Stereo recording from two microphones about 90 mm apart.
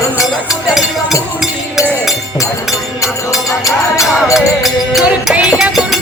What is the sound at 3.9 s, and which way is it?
Music, 35° left (ahead or behind).